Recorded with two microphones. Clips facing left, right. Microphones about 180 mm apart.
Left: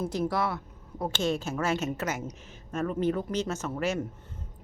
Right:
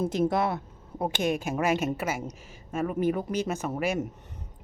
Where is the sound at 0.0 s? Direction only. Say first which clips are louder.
Right 3 dB; 20° right (ahead or behind).